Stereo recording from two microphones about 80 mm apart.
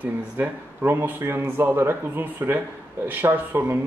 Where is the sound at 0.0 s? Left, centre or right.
Right.